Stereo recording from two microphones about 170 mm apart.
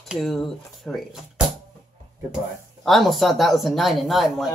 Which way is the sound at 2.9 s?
Centre (ahead or behind).